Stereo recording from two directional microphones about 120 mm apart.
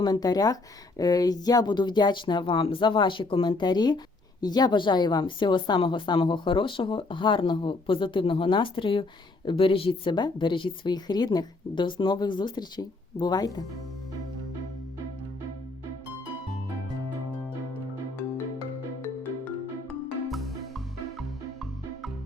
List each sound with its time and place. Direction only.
0.0 s speech: 35° left (ahead or behind)